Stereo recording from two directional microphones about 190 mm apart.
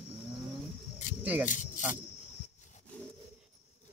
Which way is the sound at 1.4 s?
45° left (ahead or behind).